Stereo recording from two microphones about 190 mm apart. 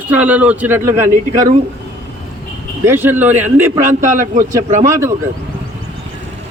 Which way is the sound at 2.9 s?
10° right (ahead or behind).